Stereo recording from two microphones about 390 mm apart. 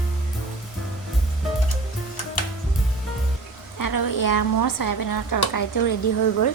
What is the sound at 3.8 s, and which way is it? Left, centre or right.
A woman's voice, left.